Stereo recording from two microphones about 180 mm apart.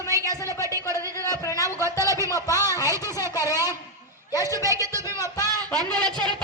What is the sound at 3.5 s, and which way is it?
A woman's voice, 20° left (ahead or behind).